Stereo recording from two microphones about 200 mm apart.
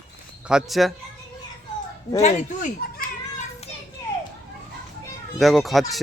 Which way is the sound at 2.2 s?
35° left (ahead or behind).